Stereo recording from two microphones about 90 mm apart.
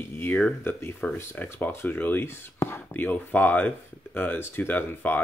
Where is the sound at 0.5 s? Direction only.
25° left (ahead or behind).